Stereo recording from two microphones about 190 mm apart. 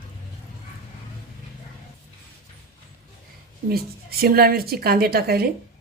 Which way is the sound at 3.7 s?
55° right (ahead or behind).